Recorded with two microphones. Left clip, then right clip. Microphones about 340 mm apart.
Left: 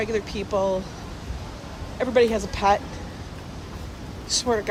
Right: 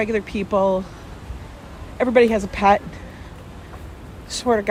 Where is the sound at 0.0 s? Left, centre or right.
Centre.